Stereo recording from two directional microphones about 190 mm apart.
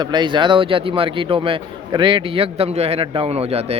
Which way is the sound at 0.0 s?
25° right (ahead or behind).